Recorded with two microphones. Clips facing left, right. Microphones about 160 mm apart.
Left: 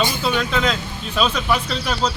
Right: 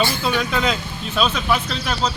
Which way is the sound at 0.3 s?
5° right (ahead or behind).